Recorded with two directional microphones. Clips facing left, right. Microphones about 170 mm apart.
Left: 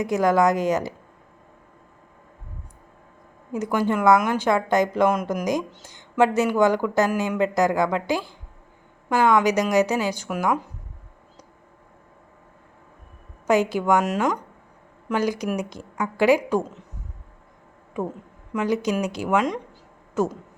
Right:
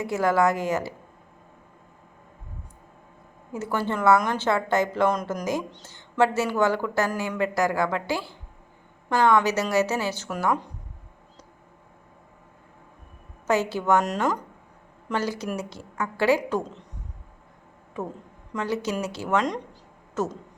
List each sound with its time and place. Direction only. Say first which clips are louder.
0.0 s speech: left 3 dB; 15° left (ahead or behind)
3.5 s speech: left 5 dB; 15° left (ahead or behind)
13.5 s speech: left 3 dB; 15° left (ahead or behind)
15.1 s speech: left 4 dB; 15° left (ahead or behind)
18.0 s speech: left 4 dB; 10° left (ahead or behind)